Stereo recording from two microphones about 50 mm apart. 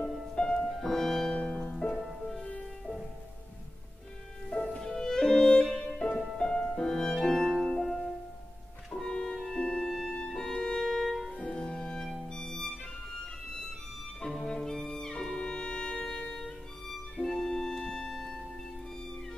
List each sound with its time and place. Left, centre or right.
0.0 s music: centre
0.4 s music: centre
1.3 s music: centre
4.7 s music: centre
8.9 s music: centre